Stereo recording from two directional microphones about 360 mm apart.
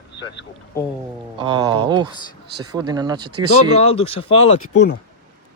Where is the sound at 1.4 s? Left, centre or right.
Centre.